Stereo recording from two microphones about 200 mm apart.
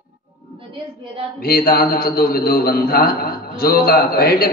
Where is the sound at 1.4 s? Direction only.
45° left (ahead or behind).